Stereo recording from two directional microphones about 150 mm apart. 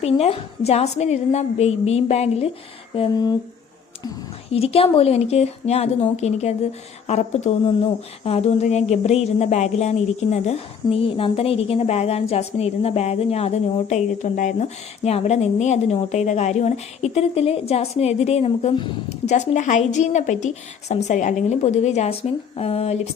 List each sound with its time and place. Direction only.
0.0 s speech: 40° left (ahead or behind)
3.1 s speech: 25° left (ahead or behind)
4.5 s speech: 40° left (ahead or behind)
19.2 s speech: 50° left (ahead or behind)